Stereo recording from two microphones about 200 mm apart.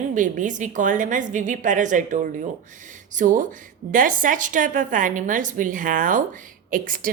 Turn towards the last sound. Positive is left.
turn(degrees=-45)  # may be behind; listen again after turning